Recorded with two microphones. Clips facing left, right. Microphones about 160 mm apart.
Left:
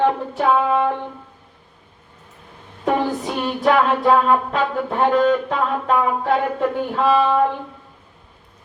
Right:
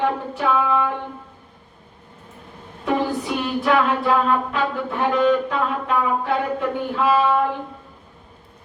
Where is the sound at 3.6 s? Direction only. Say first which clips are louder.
Left 4 dB; 40° left (ahead or behind).